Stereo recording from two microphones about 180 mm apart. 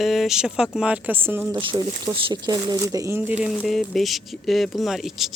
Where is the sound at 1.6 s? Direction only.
30° right (ahead or behind).